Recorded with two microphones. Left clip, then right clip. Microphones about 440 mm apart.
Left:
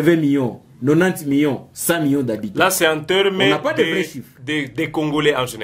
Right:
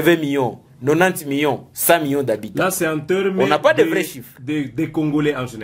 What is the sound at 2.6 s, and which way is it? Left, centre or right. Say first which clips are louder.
Speech: left 7 dB; left.